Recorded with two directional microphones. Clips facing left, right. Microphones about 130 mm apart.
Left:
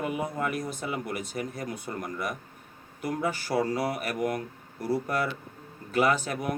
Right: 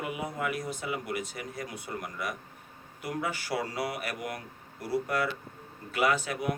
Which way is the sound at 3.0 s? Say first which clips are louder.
Left 4 dB; 45° left (ahead or behind).